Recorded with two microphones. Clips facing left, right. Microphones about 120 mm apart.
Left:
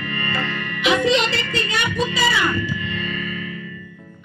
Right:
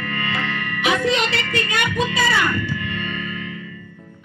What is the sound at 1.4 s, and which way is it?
Music, 60° right (ahead or behind).